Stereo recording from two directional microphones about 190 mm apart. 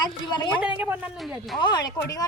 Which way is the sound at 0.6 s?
5° right (ahead or behind).